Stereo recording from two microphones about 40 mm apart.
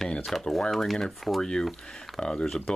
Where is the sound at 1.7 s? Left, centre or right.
Centre.